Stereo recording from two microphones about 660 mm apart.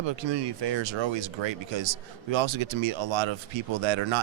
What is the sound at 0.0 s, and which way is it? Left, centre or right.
A man's voice, right.